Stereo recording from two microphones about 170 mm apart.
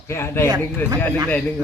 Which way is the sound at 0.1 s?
15° left (ahead or behind).